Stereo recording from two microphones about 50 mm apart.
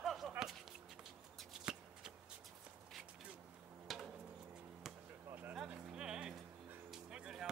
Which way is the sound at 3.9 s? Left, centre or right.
Centre.